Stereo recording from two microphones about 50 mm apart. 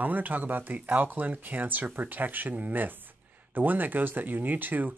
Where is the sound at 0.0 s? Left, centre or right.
Right.